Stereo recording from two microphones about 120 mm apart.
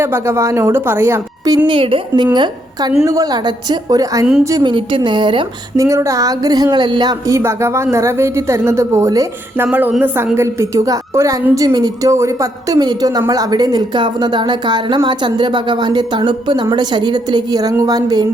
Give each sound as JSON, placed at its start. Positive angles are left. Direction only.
{"t": 0.0, "sound": "a woman's voice", "side_deg": -20}
{"t": 1.5, "sound": "a woman's voice", "side_deg": -40}
{"t": 2.2, "sound": "a woman's voice", "side_deg": -35}
{"t": 4.7, "sound": "a woman's voice", "side_deg": -45}
{"t": 5.7, "sound": "a woman's voice", "side_deg": -25}
{"t": 10.3, "sound": "a woman's voice", "side_deg": -25}